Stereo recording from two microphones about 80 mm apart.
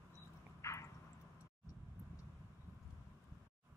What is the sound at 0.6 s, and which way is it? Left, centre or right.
Drip, left.